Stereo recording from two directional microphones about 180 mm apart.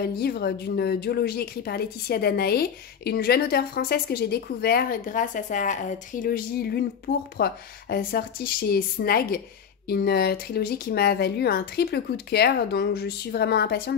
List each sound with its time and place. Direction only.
0.0 s speech: 60° left (ahead or behind)
6.2 s speech: 60° left (ahead or behind)